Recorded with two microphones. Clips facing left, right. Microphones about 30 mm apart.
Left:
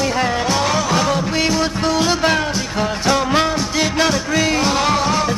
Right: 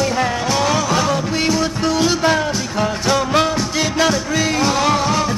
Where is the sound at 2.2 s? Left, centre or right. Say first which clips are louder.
Right 1 dB; left.